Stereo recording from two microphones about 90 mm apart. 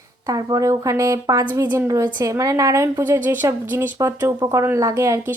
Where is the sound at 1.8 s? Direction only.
40° right (ahead or behind).